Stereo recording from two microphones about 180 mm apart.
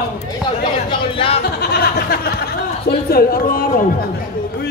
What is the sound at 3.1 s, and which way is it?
Speech, 55° left (ahead or behind).